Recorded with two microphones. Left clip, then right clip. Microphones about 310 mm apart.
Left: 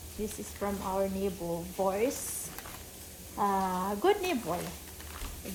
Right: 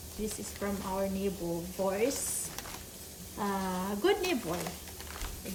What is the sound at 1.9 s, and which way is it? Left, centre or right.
Speech, centre.